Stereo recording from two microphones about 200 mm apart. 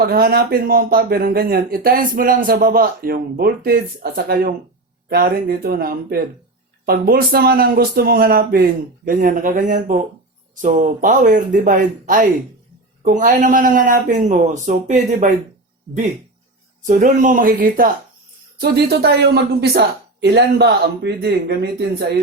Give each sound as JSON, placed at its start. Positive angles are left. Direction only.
{"t": 0.0, "sound": "speech", "side_deg": -50}
{"t": 16.8, "sound": "speech", "side_deg": -40}